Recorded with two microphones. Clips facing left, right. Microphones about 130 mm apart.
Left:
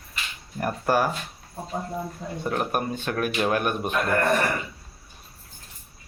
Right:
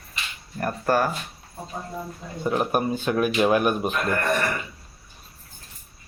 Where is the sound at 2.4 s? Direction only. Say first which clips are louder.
Right 4 dB; 5° right (ahead or behind).